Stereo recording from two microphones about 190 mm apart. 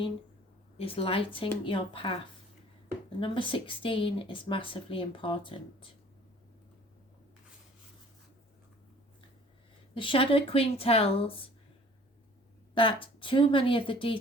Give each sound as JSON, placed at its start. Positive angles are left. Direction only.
{"t": 0.8, "sound": "speech", "side_deg": 30}
{"t": 3.2, "sound": "speech", "side_deg": 25}
{"t": 9.9, "sound": "speech", "side_deg": 25}
{"t": 12.7, "sound": "speech", "side_deg": 25}